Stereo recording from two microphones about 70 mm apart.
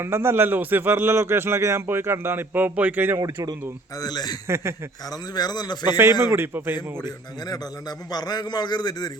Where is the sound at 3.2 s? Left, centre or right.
Right.